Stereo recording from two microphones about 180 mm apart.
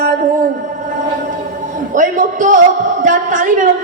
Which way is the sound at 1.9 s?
45° right (ahead or behind).